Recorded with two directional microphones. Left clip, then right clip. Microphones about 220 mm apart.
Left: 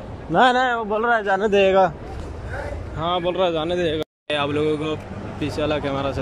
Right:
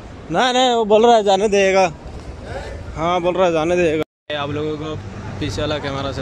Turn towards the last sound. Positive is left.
turn(degrees=5)  # may be behind; listen again after turning